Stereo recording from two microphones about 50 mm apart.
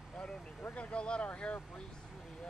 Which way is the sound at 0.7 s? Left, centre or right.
Left.